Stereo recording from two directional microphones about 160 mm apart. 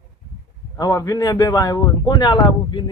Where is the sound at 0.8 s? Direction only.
25° left (ahead or behind).